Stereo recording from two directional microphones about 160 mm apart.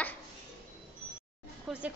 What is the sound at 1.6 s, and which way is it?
Speech, 5° right (ahead or behind).